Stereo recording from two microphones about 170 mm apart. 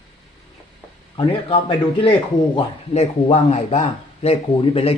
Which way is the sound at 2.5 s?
40° left (ahead or behind).